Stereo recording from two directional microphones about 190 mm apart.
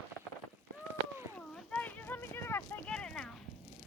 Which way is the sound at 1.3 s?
5° left (ahead or behind).